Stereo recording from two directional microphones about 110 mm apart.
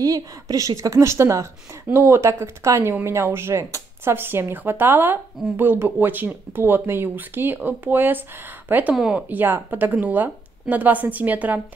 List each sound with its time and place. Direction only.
0.0 s a woman's voice: 35° right (ahead or behind); by 8.9 s 15° right (ahead or behind)
8.9 s speech: 5° right (ahead or behind)
9.3 s a woman's voice: 15° right (ahead or behind)